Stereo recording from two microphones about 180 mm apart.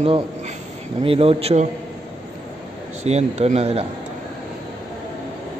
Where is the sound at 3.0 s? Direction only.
35° right (ahead or behind).